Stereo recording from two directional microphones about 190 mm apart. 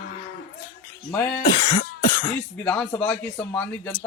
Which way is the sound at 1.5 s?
40° left (ahead or behind).